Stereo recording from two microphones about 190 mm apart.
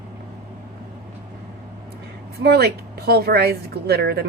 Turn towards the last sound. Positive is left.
turn(degrees=-55)  # may be behind; listen again after turning